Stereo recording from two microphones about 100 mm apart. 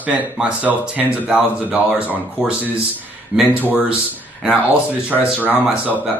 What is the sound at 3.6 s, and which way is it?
Speech, 20° left (ahead or behind).